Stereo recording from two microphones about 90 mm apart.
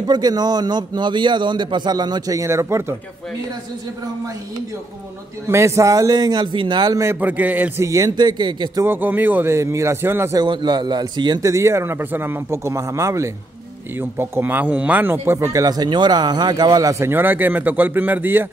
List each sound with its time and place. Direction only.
0.0 s a man's voice: 50° right (ahead or behind); by 3.0 s 30° right (ahead or behind)
5.5 s a man's voice: 30° right (ahead or behind); by 7.0 s 55° right (ahead or behind)
7.2 s a man's voice: 20° right (ahead or behind)
7.8 s speech: 40° right (ahead or behind)
8.2 s a man's voice: 55° right (ahead or behind)
8.8 s a man's voice: 25° right (ahead or behind)
10.4 s a man's voice: 55° right (ahead or behind)
11.4 s speech: 35° right (ahead or behind)
17.0 s a man's voice: 25° right (ahead or behind)